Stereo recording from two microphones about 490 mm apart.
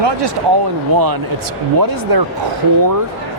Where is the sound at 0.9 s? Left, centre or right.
Right.